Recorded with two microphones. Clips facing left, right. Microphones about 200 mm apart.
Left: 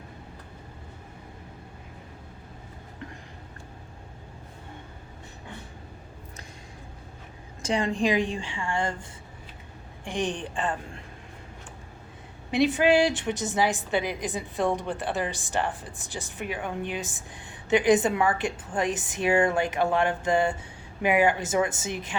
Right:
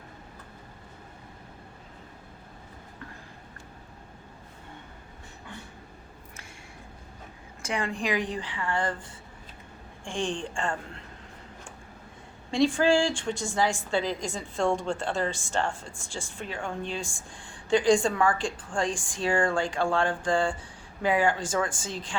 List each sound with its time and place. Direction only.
8.0 s a woman's voice: 20° left (ahead or behind)
10.0 s a woman's voice: 20° left (ahead or behind)
12.5 s a woman's voice: 20° left (ahead or behind)